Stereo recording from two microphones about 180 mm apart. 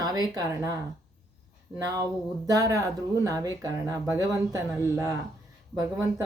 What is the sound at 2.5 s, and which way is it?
Speech, 20° right (ahead or behind).